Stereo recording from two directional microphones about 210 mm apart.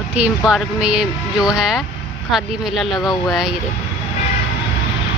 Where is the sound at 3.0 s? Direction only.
20° left (ahead or behind).